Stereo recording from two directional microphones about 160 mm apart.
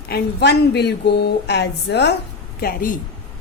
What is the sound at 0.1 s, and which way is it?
Speech, 90° left.